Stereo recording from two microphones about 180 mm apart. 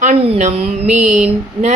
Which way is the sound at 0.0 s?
40° right (ahead or behind).